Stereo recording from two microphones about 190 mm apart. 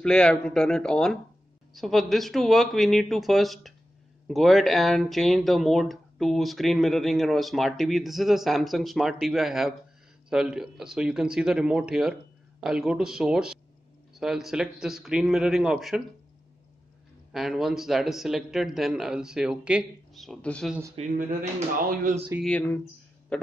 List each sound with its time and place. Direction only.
0.0 s speech: 5° left (ahead or behind)
17.3 s speech: centre (ahead or behind)
21.2 s speech: 45° right (ahead or behind)
22.4 s speech: 5° left (ahead or behind)